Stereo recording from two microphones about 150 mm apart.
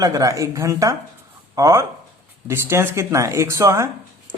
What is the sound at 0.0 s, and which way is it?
Speech, 25° right (ahead or behind).